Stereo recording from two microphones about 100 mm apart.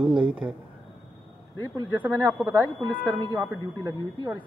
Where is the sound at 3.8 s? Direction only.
35° right (ahead or behind).